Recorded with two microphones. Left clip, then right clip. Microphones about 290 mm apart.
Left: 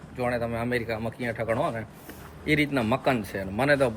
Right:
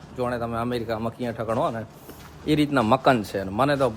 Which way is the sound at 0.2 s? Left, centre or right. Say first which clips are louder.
Right 1 dB; centre.